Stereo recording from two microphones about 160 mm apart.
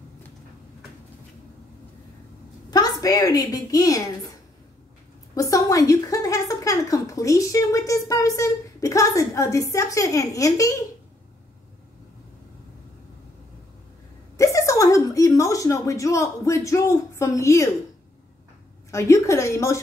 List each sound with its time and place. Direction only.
2.7 s a woman's voice: 25° left (ahead or behind)
5.3 s a woman's voice: 20° left (ahead or behind)
14.3 s a sound: 20° left (ahead or behind)
18.9 s a woman's voice: 20° left (ahead or behind)